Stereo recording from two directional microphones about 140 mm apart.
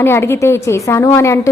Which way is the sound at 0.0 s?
15° left (ahead or behind).